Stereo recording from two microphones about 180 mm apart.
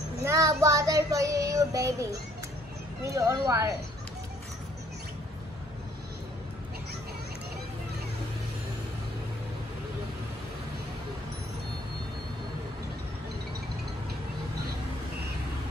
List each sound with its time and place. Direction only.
0.2 s child singing: 15° right (ahead or behind)
3.1 s speech: 20° right (ahead or behind)